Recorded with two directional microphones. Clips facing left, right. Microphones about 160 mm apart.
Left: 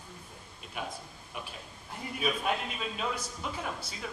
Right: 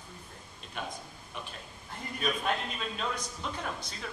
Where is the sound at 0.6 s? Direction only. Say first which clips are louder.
Even; 5° left (ahead or behind).